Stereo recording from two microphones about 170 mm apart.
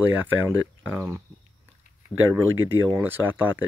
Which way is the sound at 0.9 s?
20° right (ahead or behind).